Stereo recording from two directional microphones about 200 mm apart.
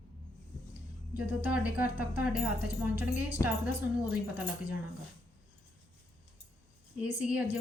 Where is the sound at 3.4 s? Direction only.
15° left (ahead or behind).